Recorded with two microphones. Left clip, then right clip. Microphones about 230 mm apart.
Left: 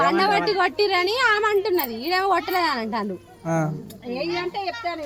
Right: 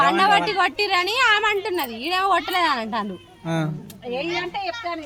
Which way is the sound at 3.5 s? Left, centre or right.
Centre.